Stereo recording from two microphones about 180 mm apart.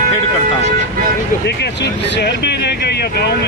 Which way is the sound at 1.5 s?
70° left (ahead or behind).